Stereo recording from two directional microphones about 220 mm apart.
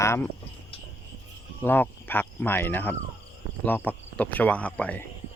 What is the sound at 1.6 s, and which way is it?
Speech, 10° left (ahead or behind).